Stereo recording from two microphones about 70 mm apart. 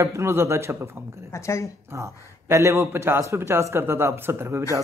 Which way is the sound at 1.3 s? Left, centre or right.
Left.